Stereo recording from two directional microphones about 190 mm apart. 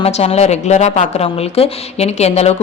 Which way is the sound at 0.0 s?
35° left (ahead or behind).